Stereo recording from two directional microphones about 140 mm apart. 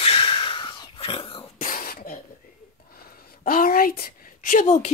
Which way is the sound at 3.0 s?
90° left.